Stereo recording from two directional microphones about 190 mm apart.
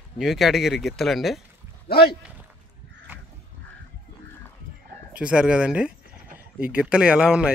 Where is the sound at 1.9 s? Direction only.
55° left (ahead or behind).